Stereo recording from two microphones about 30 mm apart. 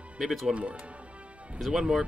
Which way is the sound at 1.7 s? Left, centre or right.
Right.